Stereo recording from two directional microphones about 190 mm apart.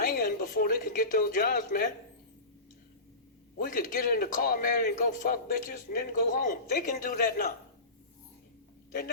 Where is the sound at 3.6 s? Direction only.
45° left (ahead or behind).